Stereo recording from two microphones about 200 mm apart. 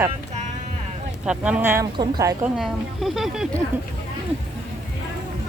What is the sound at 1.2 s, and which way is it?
Speech, 5° right (ahead or behind).